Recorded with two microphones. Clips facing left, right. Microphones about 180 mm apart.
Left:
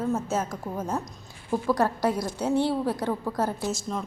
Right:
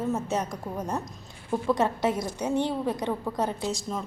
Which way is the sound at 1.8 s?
20° right (ahead or behind).